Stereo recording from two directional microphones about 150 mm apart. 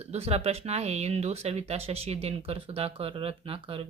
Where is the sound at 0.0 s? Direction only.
45° right (ahead or behind).